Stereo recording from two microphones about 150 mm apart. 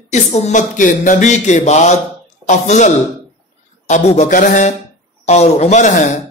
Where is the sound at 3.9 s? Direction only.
55° left (ahead or behind).